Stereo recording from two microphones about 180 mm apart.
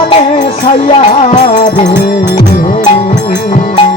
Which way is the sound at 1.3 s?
40° left (ahead or behind).